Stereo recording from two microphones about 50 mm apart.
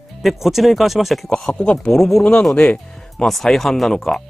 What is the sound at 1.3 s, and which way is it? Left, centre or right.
Speech, centre.